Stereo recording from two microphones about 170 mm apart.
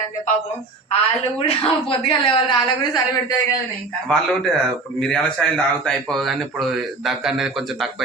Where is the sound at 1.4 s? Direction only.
35° left (ahead or behind).